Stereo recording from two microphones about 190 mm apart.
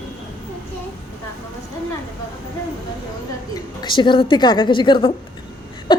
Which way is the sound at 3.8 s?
25° left (ahead or behind).